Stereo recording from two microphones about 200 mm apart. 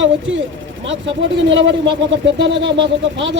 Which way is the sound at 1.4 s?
65° right (ahead or behind).